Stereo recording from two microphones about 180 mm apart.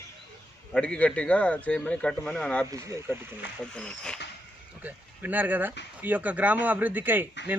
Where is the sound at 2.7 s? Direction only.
15° right (ahead or behind).